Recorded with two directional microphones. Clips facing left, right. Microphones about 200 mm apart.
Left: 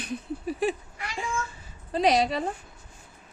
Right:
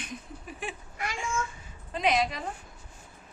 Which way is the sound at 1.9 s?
35° left (ahead or behind).